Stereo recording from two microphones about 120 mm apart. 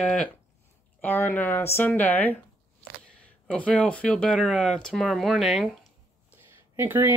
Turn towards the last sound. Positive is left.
turn(degrees=-20)  # may be behind; listen again after turning